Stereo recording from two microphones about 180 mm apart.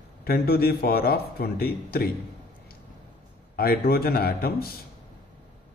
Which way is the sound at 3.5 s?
55° left (ahead or behind).